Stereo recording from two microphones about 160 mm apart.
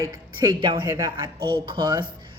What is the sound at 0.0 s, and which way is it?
A woman's voice, 25° right (ahead or behind).